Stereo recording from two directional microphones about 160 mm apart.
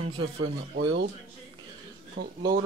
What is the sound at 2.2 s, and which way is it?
Speech, 90° right.